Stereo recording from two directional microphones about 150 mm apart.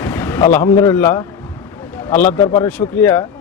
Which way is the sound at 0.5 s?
15° left (ahead or behind).